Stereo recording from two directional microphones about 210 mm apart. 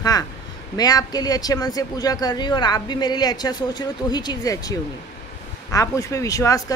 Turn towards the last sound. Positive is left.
turn(degrees=15)  # may be behind; listen again after turning